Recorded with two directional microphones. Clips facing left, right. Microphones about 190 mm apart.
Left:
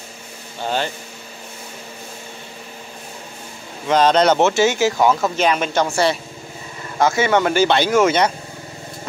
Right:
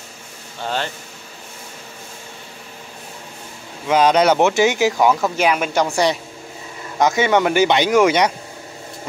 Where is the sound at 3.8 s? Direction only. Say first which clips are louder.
Even; 10° right (ahead or behind).